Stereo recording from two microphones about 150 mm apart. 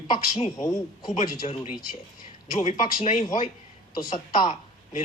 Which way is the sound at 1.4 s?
45° left (ahead or behind).